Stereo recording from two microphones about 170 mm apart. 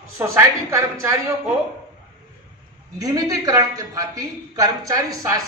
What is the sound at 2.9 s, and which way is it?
A woman's voice, 20° right (ahead or behind).